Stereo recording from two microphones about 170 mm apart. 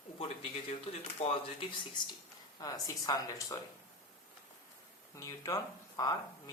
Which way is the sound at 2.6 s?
20° left (ahead or behind).